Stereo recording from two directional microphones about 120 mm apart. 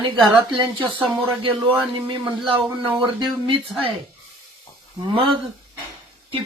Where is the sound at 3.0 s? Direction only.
40° right (ahead or behind).